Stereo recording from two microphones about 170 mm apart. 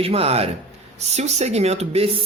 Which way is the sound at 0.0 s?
35° right (ahead or behind).